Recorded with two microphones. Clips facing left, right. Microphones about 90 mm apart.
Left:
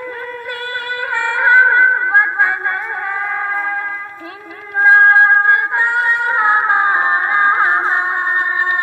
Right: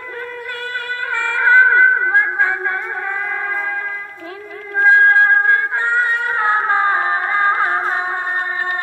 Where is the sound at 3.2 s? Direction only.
20° left (ahead or behind).